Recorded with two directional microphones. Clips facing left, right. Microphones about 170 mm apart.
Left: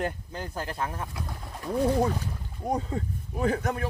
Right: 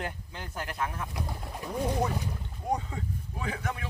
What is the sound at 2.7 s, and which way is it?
Speech, 40° left (ahead or behind).